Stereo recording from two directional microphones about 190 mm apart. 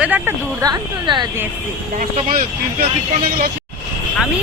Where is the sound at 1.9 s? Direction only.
40° right (ahead or behind).